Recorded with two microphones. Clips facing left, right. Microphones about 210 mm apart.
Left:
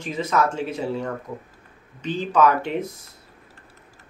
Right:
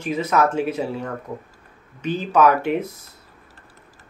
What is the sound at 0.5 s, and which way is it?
Speech, 10° right (ahead or behind).